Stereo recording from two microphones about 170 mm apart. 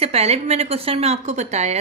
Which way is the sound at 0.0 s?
35° right (ahead or behind).